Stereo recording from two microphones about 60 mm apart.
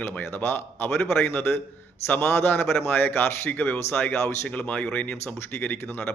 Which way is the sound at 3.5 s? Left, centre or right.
Left.